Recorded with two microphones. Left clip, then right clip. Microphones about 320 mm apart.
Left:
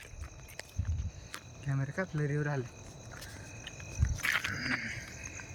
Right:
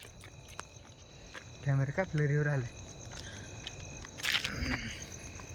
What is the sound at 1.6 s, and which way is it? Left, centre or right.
Speech, centre.